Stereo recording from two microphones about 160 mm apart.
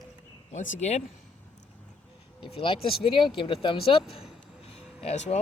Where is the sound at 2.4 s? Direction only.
35° left (ahead or behind).